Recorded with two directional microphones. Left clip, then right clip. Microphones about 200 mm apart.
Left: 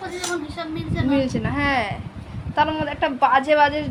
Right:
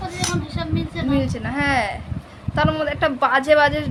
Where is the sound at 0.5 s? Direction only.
15° right (ahead or behind).